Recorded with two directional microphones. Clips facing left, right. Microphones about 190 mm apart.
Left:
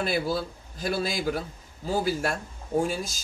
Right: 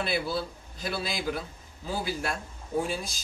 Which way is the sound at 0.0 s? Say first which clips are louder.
Left 3 dB; 50° left (ahead or behind).